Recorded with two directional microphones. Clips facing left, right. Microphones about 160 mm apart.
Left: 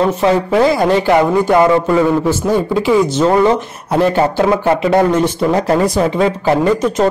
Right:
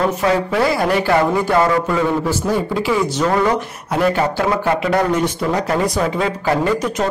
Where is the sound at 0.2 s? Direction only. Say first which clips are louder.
Left 5 dB; 20° left (ahead or behind).